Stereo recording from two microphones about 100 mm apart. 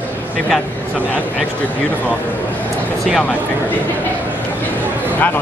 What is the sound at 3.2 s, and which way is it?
Speech, 15° left (ahead or behind).